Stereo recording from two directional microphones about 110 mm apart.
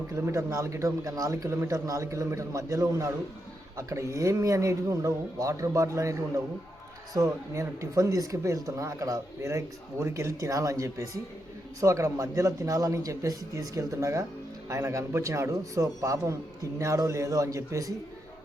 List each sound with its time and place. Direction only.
0.1 s speech: 25° right (ahead or behind)